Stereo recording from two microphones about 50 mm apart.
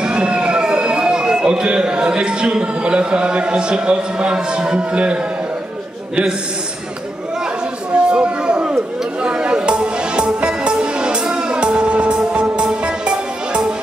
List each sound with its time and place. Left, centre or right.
0.0 s speech: right
7.9 s chatter: right
12.2 s music: centre